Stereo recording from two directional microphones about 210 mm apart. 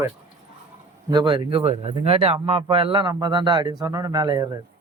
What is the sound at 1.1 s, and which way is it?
Speech, 20° right (ahead or behind).